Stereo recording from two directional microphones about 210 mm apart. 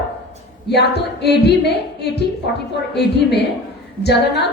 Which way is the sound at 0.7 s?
50° left (ahead or behind).